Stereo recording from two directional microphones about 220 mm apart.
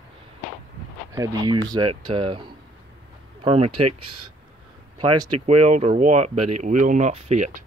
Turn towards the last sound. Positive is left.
turn(degrees=-30)  # may be behind; listen again after turning